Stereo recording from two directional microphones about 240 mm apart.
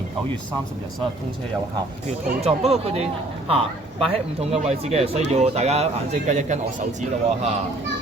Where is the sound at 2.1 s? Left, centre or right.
Right.